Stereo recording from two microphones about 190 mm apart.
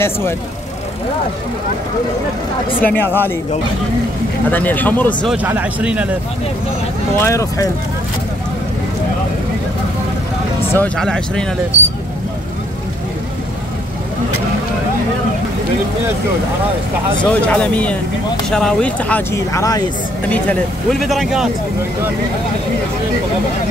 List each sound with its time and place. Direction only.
2.8 s speech: 10° left (ahead or behind)
4.5 s speech: 10° left (ahead or behind)
5.3 s a man's voice: 10° right (ahead or behind)
7.2 s speech: 15° left (ahead or behind)
10.7 s speech: 5° left (ahead or behind)
11.7 s vehicle: 40° left (ahead or behind)
17.3 s speech: 5° left (ahead or behind)
20.2 s speech: 5° left (ahead or behind)